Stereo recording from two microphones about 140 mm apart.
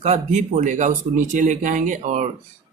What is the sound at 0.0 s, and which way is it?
Speech, 50° right (ahead or behind).